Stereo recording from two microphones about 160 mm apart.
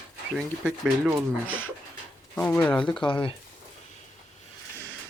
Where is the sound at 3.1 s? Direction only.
30° left (ahead or behind).